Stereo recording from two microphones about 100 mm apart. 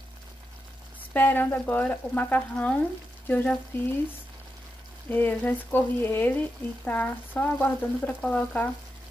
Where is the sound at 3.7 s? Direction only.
20° left (ahead or behind).